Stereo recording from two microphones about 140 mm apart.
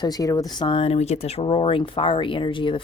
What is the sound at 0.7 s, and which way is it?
Speech, 45° left (ahead or behind).